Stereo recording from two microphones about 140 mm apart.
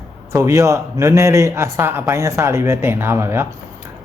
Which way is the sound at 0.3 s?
20° right (ahead or behind).